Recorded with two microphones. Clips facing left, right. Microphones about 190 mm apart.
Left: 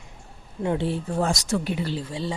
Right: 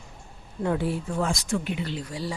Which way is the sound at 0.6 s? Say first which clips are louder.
Left 1 dB; 25° left (ahead or behind).